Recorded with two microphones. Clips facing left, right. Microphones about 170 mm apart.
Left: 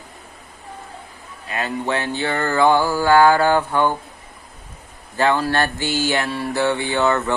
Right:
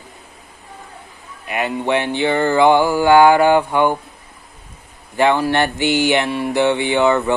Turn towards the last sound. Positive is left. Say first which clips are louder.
# right 4 dB
turn(degrees=-15)  # may be behind; listen again after turning